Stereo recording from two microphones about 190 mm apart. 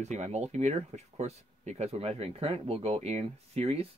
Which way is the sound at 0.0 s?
35° right (ahead or behind).